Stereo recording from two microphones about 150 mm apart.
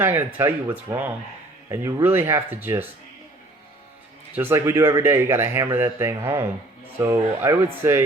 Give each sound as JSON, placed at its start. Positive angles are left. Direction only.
{"t": 0.0, "sound": "speech", "side_deg": -15}
{"t": 4.4, "sound": "speech", "side_deg": -15}